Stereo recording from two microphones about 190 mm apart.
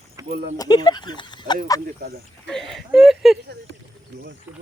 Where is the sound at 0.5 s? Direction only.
20° left (ahead or behind).